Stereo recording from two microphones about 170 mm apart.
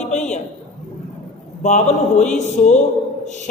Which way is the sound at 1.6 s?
45° left (ahead or behind).